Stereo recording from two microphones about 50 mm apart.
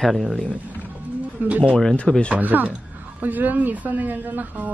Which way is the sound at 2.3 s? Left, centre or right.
Right.